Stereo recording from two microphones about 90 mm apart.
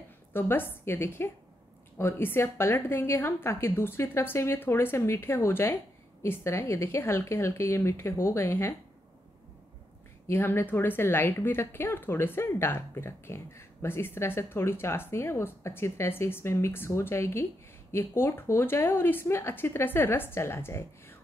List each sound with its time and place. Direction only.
0.3 s speech: 25° left (ahead or behind)
10.2 s speech: 25° left (ahead or behind)